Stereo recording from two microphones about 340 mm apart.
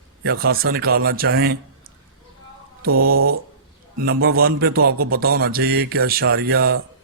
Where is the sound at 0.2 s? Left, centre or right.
Right.